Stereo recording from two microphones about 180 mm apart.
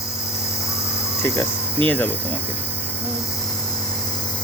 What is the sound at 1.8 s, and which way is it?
Speech, 10° left (ahead or behind).